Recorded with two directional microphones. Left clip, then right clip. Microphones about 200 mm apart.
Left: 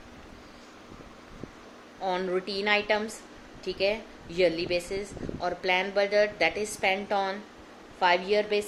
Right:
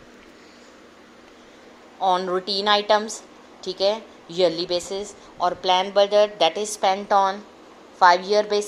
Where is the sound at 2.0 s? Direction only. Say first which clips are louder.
Right 8 dB; 15° right (ahead or behind).